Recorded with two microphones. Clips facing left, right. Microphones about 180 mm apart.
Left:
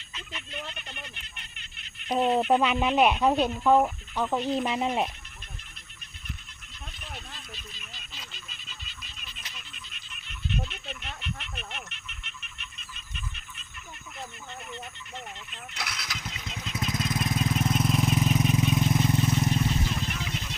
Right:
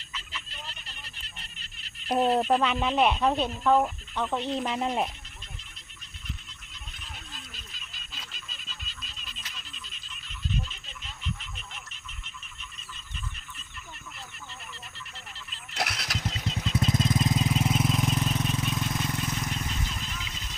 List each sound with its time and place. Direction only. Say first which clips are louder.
0.5 s goat: left 6 dB; 65° left (ahead or behind)
2.0 s speech: even; centre (ahead or behind)
2.4 s speech: left 2 dB; 10° left (ahead or behind)
10.5 s wild animals: left 2 dB; 70° left (ahead or behind)
15.7 s vehicle: right 6 dB; 40° right (ahead or behind); by 19.8 s 25° left (ahead or behind)
20.1 s vehicle: left 6 dB; 70° left (ahead or behind)